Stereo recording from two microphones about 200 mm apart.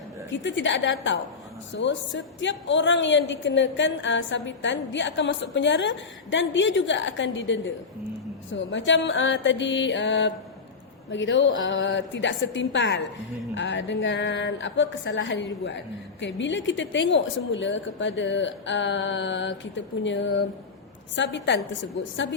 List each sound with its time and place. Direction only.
0.3 s a woman's voice: 65° left (ahead or behind)
21.2 s a woman's voice: 60° left (ahead or behind)